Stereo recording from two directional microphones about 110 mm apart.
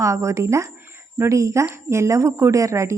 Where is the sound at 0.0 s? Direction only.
30° right (ahead or behind).